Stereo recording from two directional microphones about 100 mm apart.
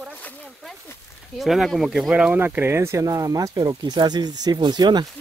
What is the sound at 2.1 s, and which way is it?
Speech, 15° right (ahead or behind).